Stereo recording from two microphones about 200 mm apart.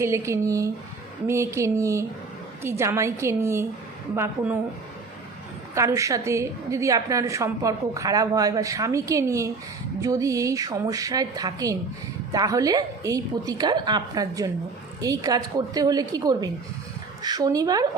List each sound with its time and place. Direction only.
0.0 s a woman's voice: 15° right (ahead or behind)
5.7 s a woman's voice: 15° right (ahead or behind)